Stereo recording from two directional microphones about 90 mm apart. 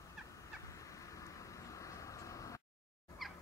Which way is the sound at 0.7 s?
35° left (ahead or behind).